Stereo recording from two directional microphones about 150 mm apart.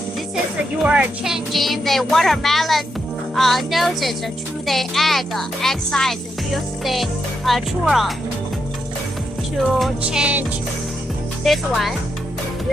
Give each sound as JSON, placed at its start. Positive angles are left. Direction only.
{"t": 0.9, "sound": "speech", "side_deg": -5}
{"t": 9.7, "sound": "speech", "side_deg": -5}
{"t": 11.4, "sound": "speech", "side_deg": 0}